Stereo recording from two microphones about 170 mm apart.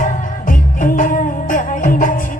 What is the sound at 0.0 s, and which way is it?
Music, 50° left (ahead or behind).